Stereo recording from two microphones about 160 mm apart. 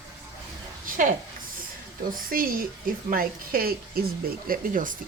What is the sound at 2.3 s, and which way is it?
Speech, 65° right (ahead or behind).